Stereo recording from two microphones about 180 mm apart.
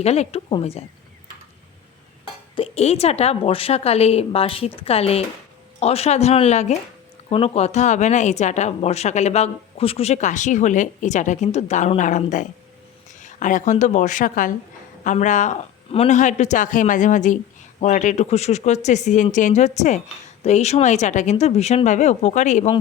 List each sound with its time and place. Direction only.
0.0 s a woman's voice: 35° left (ahead or behind)
2.6 s a woman's voice: 35° left (ahead or behind)